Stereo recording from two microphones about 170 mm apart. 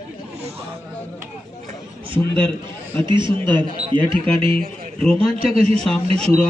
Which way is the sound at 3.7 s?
40° right (ahead or behind).